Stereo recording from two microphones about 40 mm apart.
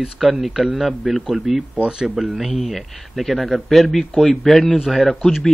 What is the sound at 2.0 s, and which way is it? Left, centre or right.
Speech, centre.